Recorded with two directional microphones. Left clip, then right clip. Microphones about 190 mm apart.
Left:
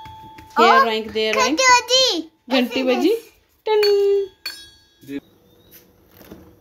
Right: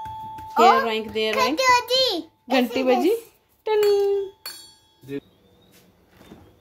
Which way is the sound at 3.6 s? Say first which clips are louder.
Left 3 dB; 5° left (ahead or behind).